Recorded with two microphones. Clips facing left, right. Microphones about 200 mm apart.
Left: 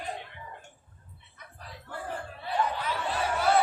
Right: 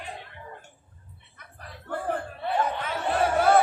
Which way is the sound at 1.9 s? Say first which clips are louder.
Right 8 dB; 60° right (ahead or behind).